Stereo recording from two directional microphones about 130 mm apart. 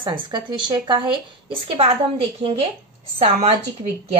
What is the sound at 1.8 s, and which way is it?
Speech, 50° right (ahead or behind).